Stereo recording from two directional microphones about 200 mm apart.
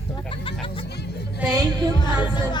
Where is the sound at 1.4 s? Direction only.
15° right (ahead or behind).